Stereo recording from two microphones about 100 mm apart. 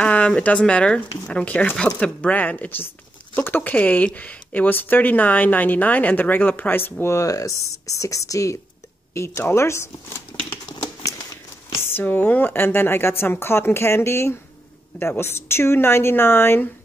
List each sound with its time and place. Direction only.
0.0 s speech: 10° left (ahead or behind)
11.7 s speech: 20° left (ahead or behind)